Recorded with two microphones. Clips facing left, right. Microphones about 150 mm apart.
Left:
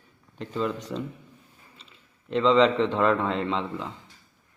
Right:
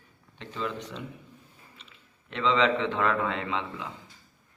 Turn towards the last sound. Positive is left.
turn(degrees=35)  # may be behind; listen again after turning